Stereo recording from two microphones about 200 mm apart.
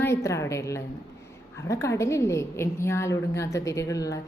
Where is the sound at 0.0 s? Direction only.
15° left (ahead or behind).